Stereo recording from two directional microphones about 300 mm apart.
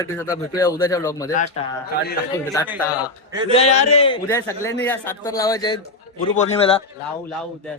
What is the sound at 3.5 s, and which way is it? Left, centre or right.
A man's voice, left.